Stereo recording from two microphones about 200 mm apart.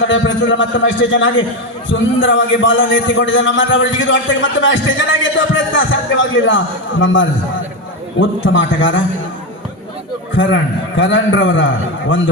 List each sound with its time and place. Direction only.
0.0 s a man's voice: 75° left (ahead or behind)
10.3 s a man's voice: 70° left (ahead or behind)